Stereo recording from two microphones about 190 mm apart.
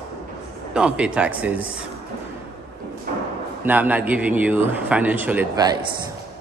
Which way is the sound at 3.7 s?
10° right (ahead or behind).